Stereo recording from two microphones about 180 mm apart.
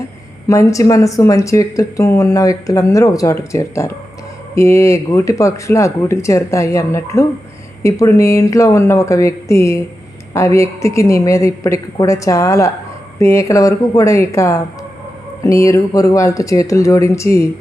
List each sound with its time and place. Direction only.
0.4 s speech: 15° left (ahead or behind)